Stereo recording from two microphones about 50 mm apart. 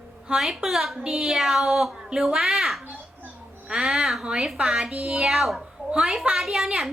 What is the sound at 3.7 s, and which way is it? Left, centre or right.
A child's voice, centre.